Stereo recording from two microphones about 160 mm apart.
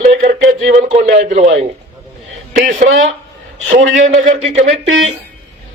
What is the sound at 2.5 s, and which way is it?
Speech, 50° right (ahead or behind).